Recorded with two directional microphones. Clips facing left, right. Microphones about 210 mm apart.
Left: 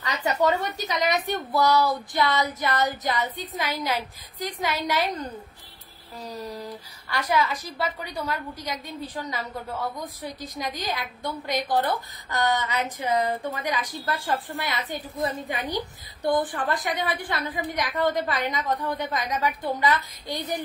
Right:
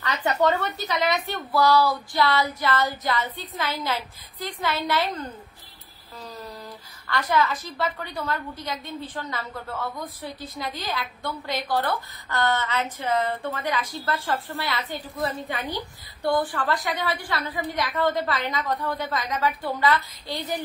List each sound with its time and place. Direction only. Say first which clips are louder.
0.2 s a woman's voice: right 1 dB; 10° left (ahead or behind)